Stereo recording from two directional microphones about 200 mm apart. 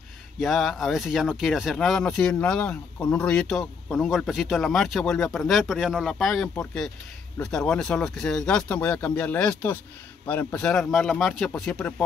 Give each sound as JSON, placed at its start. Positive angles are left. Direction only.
{"t": 0.4, "sound": "speech", "side_deg": 0}